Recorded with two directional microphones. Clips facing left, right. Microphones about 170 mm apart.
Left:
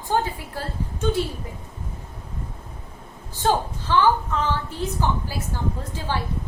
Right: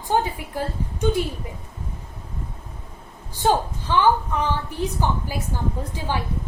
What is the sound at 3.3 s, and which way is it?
A woman's voice, 15° right (ahead or behind).